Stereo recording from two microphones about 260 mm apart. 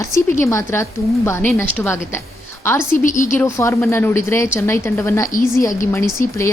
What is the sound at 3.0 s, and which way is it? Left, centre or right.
Speech, left.